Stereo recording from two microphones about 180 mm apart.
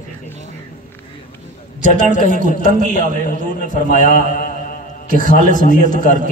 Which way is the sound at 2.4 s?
50° right (ahead or behind).